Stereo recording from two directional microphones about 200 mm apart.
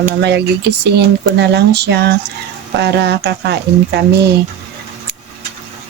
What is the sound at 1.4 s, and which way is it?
Speech, 55° right (ahead or behind).